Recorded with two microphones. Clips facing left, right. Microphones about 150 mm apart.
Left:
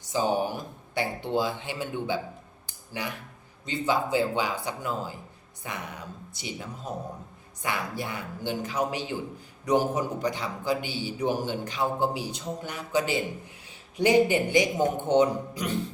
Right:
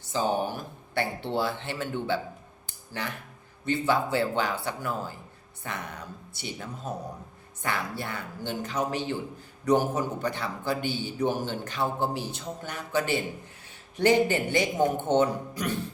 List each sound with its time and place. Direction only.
0.0 s a man's voice: 15° left (ahead or behind)
3.7 s a man's voice: 15° left (ahead or behind)